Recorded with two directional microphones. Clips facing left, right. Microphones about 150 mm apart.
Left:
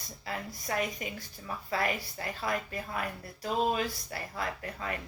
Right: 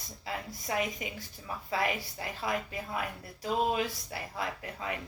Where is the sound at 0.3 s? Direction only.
15° right (ahead or behind).